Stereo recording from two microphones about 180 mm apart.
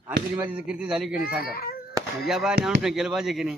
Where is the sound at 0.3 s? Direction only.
10° right (ahead or behind).